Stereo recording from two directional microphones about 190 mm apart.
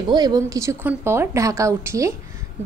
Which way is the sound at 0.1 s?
20° right (ahead or behind).